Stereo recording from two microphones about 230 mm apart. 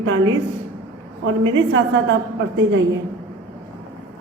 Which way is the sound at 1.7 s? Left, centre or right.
Right.